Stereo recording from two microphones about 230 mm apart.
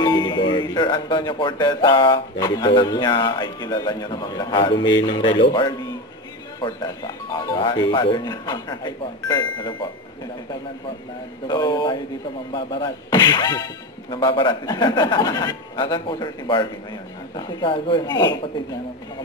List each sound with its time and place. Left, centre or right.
0.0 s speech: centre
11.4 s speech: centre
12.5 s music: centre
14.1 s speech: left